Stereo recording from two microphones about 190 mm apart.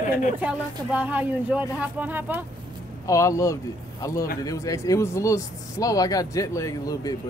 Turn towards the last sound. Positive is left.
turn(degrees=20)  # may be behind; listen again after turning